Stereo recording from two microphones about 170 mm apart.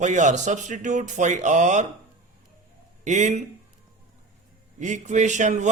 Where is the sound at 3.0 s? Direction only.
45° right (ahead or behind).